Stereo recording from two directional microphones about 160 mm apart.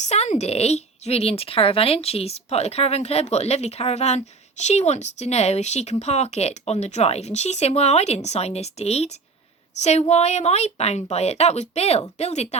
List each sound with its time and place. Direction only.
0.0 s a woman's voice: 45° left (ahead or behind)